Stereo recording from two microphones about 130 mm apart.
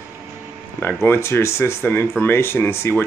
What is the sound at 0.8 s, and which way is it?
Speech, 20° left (ahead or behind).